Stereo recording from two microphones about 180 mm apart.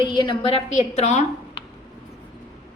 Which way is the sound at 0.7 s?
40° left (ahead or behind).